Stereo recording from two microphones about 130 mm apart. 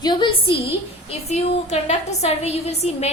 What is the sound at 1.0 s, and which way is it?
A woman's voice, 55° left (ahead or behind).